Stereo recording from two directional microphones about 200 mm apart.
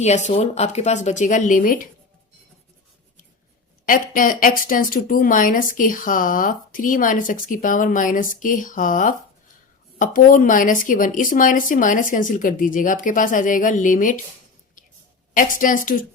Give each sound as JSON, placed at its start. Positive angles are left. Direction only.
{"t": 0.0, "sound": "a woman's voice", "side_deg": 35}
{"t": 3.8, "sound": "a woman's voice", "side_deg": 45}
{"t": 15.3, "sound": "a woman's voice", "side_deg": 40}